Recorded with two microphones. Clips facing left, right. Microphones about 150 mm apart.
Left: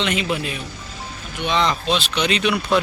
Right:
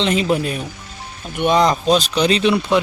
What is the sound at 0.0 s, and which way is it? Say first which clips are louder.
Speech: right 5 dB; 35° right (ahead or behind).